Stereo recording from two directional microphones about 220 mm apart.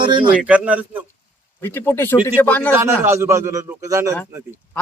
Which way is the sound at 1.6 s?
10° left (ahead or behind).